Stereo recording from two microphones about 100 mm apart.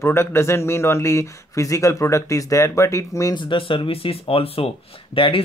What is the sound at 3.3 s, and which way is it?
Speech, 60° left (ahead or behind).